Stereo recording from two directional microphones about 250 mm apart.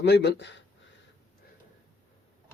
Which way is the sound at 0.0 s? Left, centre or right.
Left.